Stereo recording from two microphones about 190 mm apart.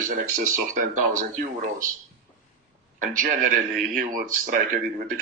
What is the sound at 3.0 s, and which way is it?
Speech, 45° right (ahead or behind).